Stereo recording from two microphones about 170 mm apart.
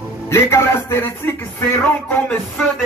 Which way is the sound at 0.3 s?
15° left (ahead or behind).